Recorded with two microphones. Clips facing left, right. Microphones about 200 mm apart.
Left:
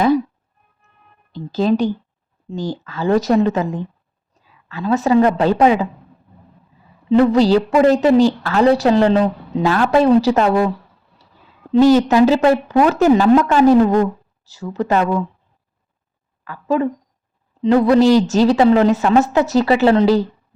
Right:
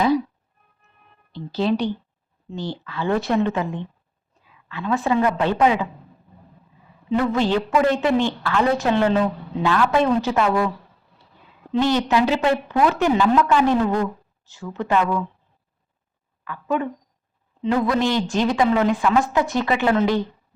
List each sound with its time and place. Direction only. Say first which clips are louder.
1.3 s a woman's voice: left 5 dB; 45° left (ahead or behind)
7.1 s a woman's voice: left 8 dB; 35° left (ahead or behind)
11.7 s a woman's voice: left 8 dB; 40° left (ahead or behind)
16.4 s a woman's voice: left 6 dB; 35° left (ahead or behind)